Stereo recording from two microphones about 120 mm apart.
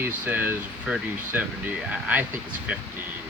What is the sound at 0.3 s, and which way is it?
Speech, 15° right (ahead or behind).